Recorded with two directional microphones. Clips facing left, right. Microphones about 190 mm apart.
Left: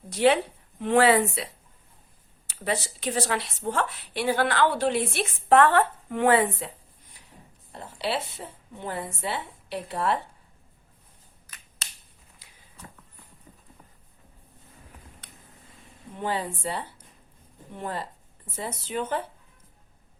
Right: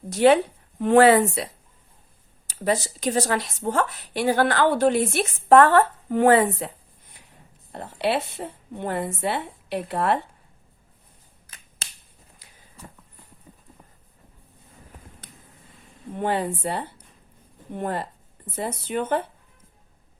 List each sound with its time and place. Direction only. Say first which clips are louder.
0.1 s a woman's voice: right 4 dB; 45° right (ahead or behind)
2.5 s speech: right 5 dB; 40° right (ahead or behind)
7.7 s a woman's voice: right 5 dB; 60° right (ahead or behind)
11.4 s finger snapping: right 3 dB; 55° right (ahead or behind)
16.1 s a woman's voice: right 5 dB; 55° right (ahead or behind)